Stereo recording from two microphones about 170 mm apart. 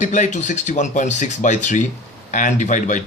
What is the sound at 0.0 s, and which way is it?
Speech, 45° left (ahead or behind).